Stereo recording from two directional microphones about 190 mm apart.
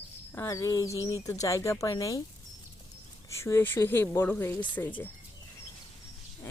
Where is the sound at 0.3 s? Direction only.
15° left (ahead or behind).